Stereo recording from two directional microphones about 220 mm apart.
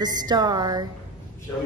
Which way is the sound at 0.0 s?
20° right (ahead or behind).